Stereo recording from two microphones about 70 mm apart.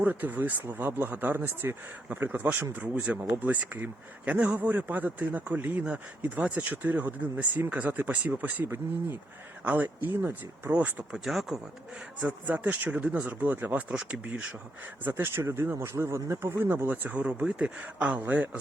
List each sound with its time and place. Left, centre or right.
0.0 s speech: right
8.6 s speech: right
9.6 s speech: right
11.2 s a man's voice: centre
12.5 s a man's voice: right
15.0 s a man's voice: right